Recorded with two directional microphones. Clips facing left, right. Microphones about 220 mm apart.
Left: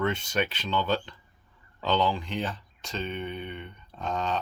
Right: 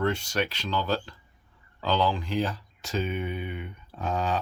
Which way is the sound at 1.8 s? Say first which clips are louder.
Even; centre (ahead or behind).